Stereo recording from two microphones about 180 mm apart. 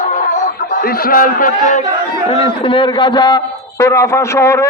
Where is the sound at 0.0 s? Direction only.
45° left (ahead or behind).